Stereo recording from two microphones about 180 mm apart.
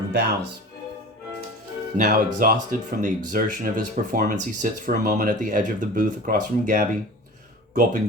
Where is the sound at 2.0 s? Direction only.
55° right (ahead or behind).